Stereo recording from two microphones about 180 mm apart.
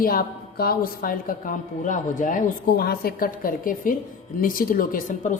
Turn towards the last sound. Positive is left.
turn(degrees=45)  # may be behind; listen again after turning